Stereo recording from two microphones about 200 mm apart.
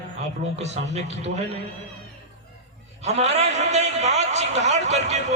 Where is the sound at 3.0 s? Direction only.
35° right (ahead or behind).